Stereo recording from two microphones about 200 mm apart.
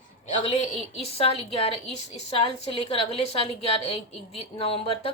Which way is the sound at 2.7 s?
30° left (ahead or behind).